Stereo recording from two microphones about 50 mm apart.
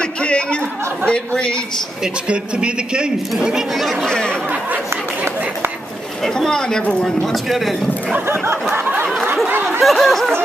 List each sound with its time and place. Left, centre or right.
0.2 s chatter: left
1.0 s speech: centre
2.2 s speech: centre
6.2 s speech: centre
7.5 s a sound: centre
9.8 s a sound: centre